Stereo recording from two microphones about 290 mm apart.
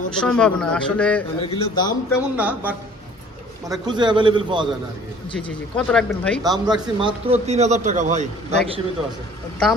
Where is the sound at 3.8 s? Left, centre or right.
Centre.